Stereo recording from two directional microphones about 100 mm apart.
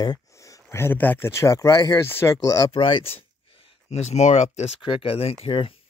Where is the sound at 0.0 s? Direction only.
40° left (ahead or behind).